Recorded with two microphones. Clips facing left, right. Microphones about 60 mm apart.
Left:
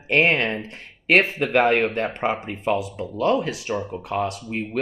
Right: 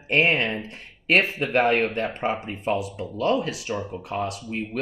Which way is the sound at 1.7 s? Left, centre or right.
Left.